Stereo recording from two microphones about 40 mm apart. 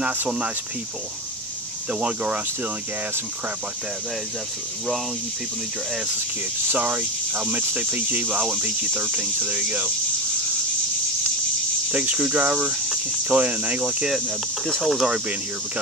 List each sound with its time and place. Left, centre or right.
1.9 s speech: right
6.8 s cricket: right
11.9 s speech: right
14.8 s speech: centre